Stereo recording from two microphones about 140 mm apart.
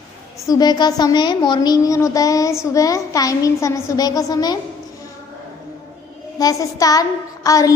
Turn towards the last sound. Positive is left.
turn(degrees=25)  # may be behind; listen again after turning